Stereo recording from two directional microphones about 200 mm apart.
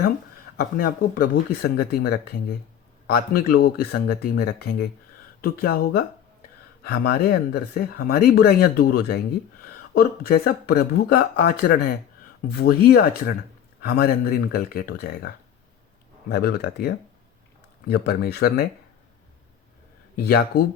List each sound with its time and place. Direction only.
0.5 s speech: 50° left (ahead or behind)
16.3 s speech: 50° left (ahead or behind)
20.2 s speech: 50° left (ahead or behind)